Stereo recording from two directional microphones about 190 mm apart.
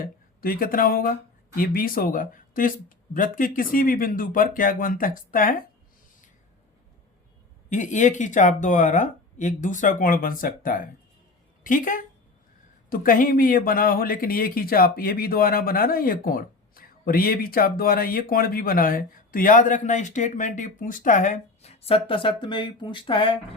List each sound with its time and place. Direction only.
0.4 s speech: 50° left (ahead or behind)
7.7 s speech: 40° left (ahead or behind)